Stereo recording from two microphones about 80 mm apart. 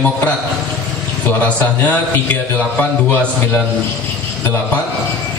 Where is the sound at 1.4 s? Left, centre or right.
Left.